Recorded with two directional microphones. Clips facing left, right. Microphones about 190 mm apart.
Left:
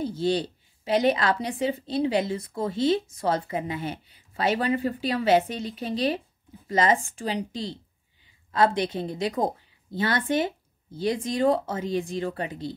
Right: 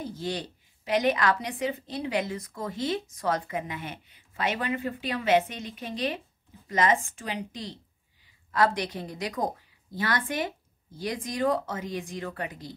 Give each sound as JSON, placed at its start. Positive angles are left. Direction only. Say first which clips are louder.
{"t": 0.0, "sound": "speech", "louder": "left 8 dB", "side_deg": 30}